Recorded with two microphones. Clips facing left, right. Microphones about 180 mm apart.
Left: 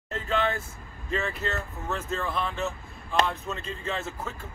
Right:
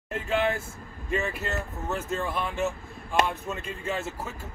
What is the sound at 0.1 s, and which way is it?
Vehicle, 10° right (ahead or behind).